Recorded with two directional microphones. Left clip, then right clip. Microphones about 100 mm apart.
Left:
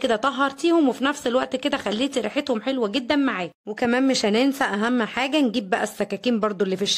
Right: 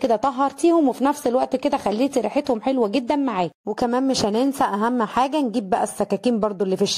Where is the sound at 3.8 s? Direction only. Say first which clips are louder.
Even; 15° right (ahead or behind).